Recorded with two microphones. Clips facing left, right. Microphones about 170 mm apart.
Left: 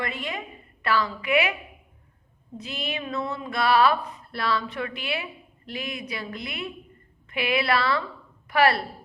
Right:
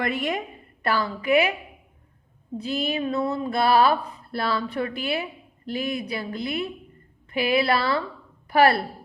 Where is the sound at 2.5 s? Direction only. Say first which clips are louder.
Right 6 dB; 35° right (ahead or behind).